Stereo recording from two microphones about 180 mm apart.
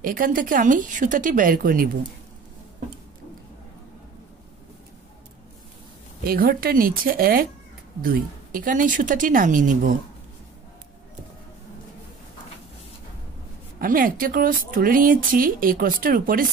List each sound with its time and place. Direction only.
0.0 s speech: 50° right (ahead or behind)
6.2 s speech: 55° right (ahead or behind)
13.7 s speech: 50° right (ahead or behind)